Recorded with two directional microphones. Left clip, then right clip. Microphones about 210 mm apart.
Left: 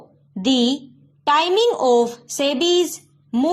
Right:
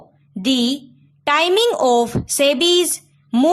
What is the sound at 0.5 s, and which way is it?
Speech, 45° right (ahead or behind).